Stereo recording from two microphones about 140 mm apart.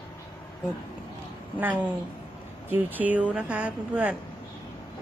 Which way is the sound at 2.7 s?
15° right (ahead or behind).